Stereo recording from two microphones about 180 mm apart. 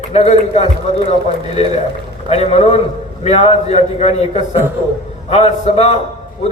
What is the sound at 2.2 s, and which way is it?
A man's voice, 35° left (ahead or behind).